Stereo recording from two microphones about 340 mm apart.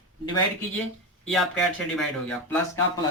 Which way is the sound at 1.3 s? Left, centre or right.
Centre.